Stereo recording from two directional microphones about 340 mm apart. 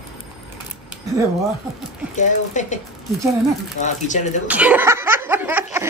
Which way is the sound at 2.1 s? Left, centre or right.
Left.